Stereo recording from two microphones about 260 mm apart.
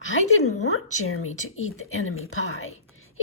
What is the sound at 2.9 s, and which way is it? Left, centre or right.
Whispering, left.